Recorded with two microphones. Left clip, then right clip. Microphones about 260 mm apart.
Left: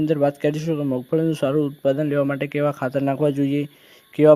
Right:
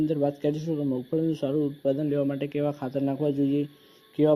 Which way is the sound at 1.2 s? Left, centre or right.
Left.